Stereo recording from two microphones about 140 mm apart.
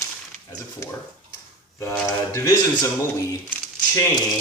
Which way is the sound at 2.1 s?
20° left (ahead or behind).